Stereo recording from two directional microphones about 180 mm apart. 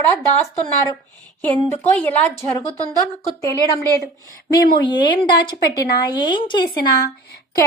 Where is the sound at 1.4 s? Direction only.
10° left (ahead or behind); by 6.7 s 25° left (ahead or behind).